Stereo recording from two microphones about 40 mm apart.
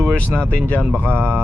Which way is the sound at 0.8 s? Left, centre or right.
Right.